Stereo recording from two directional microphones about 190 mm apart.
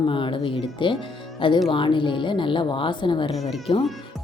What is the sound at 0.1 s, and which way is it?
Speech, 25° left (ahead or behind).